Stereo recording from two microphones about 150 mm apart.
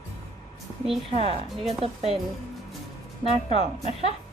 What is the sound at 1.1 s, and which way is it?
Speech, 40° right (ahead or behind).